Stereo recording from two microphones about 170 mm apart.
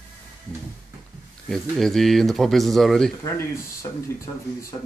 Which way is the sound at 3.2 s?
15° left (ahead or behind).